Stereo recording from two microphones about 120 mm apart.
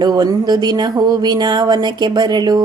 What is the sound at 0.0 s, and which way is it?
Speech, 35° right (ahead or behind).